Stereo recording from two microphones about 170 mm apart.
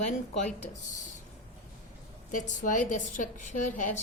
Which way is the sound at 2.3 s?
50° left (ahead or behind).